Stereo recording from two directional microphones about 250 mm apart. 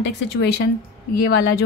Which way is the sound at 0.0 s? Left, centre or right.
Left.